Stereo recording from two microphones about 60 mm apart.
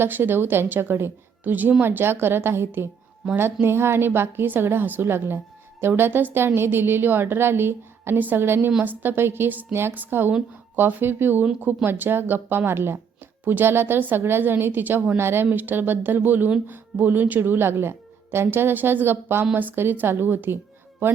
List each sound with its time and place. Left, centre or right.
0.0 s a woman's voice: right